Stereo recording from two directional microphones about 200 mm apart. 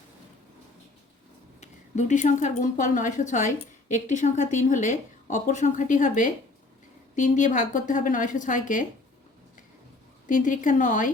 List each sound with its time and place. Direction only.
1.6 s speech: 35° left (ahead or behind)
10.2 s speech: 40° left (ahead or behind)